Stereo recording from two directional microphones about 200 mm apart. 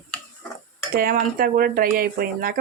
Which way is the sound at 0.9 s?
45° right (ahead or behind).